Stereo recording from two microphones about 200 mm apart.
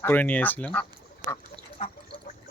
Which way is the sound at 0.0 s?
10° left (ahead or behind).